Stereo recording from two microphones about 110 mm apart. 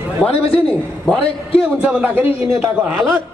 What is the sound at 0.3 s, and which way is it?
Speech, 60° left (ahead or behind).